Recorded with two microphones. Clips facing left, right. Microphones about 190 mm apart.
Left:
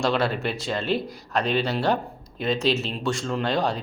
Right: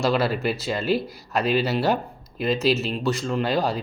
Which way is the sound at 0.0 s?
5° right (ahead or behind).